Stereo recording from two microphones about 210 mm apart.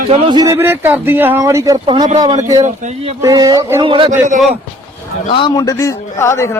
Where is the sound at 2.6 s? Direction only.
35° right (ahead or behind).